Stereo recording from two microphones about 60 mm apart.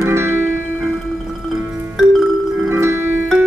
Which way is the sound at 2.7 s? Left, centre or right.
Right.